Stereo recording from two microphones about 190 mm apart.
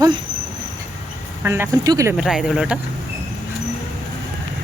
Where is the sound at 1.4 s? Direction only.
10° right (ahead or behind).